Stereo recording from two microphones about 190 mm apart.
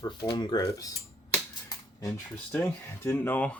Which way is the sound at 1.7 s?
20° left (ahead or behind).